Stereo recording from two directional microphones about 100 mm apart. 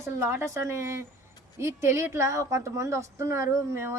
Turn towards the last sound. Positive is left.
turn(degrees=-25)  # may be behind; listen again after turning